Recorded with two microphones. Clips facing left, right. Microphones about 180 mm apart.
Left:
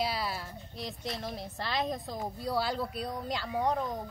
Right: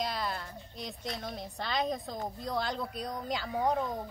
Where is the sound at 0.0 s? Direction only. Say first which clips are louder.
Left 1 dB; 5° left (ahead or behind).